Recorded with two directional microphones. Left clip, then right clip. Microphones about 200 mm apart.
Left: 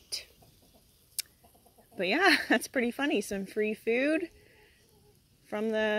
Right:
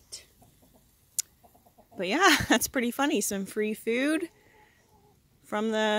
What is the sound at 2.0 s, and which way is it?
Speech, 15° right (ahead or behind).